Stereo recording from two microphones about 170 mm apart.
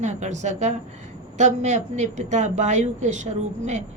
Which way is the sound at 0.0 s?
45° right (ahead or behind).